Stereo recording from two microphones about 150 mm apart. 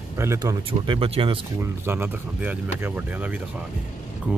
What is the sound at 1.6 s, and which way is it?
Speech, 15° right (ahead or behind).